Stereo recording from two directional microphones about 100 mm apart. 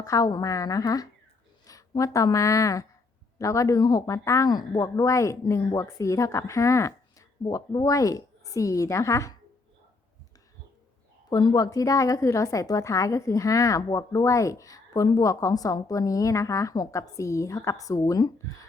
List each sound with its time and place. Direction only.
0.0 s a woman's voice: 35° left (ahead or behind)
11.3 s a woman's voice: 45° left (ahead or behind)